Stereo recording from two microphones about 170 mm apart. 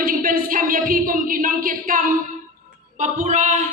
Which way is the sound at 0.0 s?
55° right (ahead or behind).